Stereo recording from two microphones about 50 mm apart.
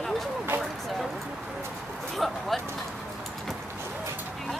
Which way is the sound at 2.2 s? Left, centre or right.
Centre.